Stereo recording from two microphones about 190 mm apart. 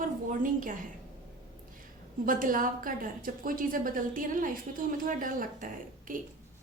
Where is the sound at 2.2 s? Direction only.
45° right (ahead or behind).